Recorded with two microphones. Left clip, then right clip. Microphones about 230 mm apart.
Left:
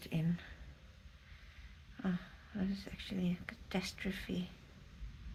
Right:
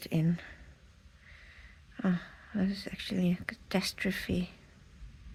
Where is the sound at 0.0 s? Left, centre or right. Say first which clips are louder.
Right 8 dB; right.